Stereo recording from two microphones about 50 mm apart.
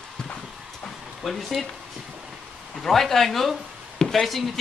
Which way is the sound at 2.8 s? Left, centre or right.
Centre.